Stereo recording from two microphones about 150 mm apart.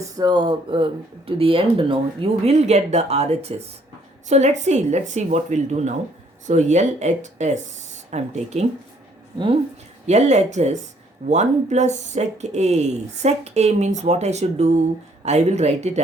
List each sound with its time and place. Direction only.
0.2 s speech: 30° right (ahead or behind); by 8.6 s 50° right (ahead or behind)
10.1 s speech: 50° right (ahead or behind)